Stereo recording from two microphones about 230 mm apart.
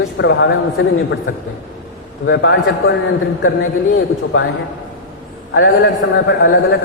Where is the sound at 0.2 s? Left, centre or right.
Left.